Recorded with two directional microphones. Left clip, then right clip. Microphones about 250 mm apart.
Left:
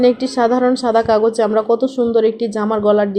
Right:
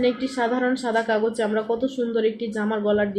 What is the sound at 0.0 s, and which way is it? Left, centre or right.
A woman's voice, left.